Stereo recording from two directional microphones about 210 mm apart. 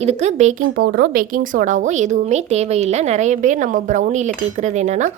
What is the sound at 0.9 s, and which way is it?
A woman's voice, 50° right (ahead or behind).